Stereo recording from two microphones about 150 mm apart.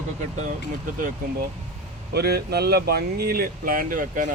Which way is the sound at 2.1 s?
90° right.